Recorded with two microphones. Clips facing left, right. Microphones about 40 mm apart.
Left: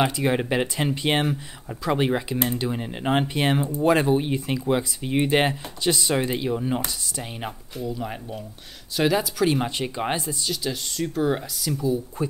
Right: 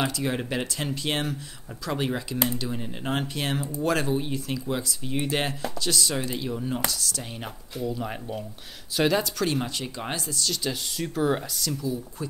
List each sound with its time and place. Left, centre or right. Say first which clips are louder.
0.0 s speech: left 5 dB; left
7.8 s speech: even; centre
9.6 s speech: left 5 dB; left
10.5 s speech: left 1 dB; centre
11.7 s speech: left 8 dB; left